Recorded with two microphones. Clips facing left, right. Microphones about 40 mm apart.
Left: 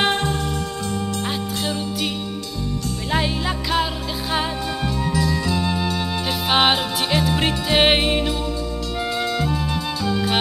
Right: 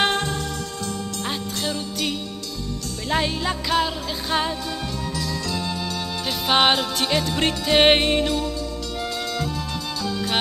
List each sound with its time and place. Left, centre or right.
0.0 s music: centre
1.6 s music: centre
3.1 s music: centre
5.1 s music: centre
6.2 s music: centre
9.2 s music: left